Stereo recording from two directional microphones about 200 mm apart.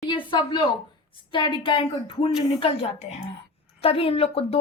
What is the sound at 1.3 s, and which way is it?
A woman's voice, 25° left (ahead or behind).